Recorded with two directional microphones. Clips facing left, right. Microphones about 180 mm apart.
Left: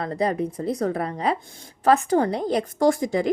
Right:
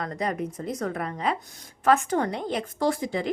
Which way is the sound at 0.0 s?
30° left (ahead or behind).